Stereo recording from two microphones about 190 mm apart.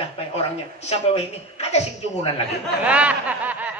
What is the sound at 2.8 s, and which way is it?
Speech, 5° right (ahead or behind).